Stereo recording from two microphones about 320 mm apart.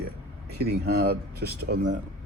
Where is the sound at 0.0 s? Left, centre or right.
Right.